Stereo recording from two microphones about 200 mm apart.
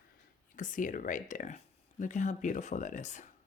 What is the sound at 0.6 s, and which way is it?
Speech, 40° left (ahead or behind).